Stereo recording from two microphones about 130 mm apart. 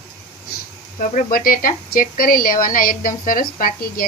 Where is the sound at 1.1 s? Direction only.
90° left.